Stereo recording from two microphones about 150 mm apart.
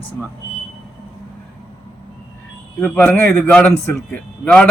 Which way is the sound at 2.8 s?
10° left (ahead or behind).